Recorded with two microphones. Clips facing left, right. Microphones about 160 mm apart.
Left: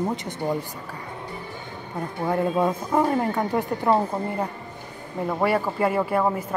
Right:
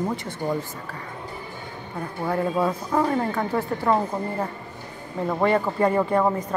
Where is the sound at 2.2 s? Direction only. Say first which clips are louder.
Left 1 dB; 20° left (ahead or behind).